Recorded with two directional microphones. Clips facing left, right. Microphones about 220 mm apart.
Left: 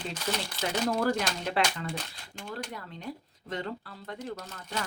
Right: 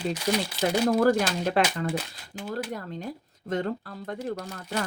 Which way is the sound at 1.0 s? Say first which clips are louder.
Right 7 dB; 45° right (ahead or behind).